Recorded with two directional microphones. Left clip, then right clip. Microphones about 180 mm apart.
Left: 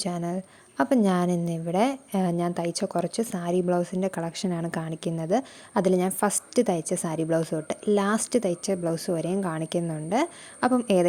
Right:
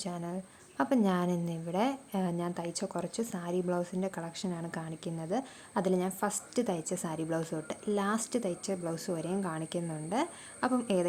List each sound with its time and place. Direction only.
0.0 s a woman's voice: 35° left (ahead or behind)